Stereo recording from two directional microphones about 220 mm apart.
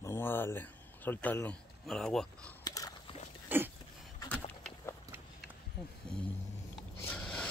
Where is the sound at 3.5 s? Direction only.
10° right (ahead or behind).